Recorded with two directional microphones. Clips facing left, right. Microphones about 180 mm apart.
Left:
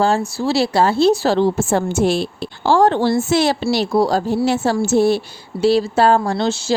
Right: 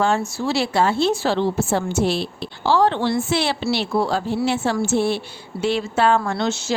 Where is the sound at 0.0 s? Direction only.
35° left (ahead or behind).